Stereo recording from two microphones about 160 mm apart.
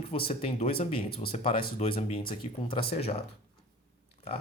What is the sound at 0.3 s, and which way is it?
Speech, 35° left (ahead or behind).